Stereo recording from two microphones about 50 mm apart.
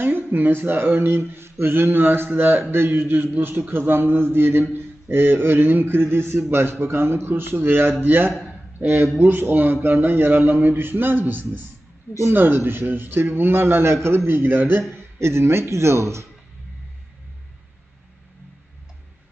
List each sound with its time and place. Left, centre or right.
0.0 s a man's voice: right
14.3 s speech: right
15.2 s speech: right